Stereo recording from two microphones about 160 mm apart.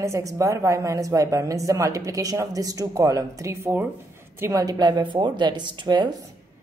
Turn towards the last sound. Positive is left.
turn(degrees=-30)  # may be behind; listen again after turning